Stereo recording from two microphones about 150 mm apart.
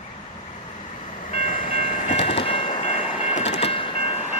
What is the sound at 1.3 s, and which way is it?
Train, 60° left (ahead or behind).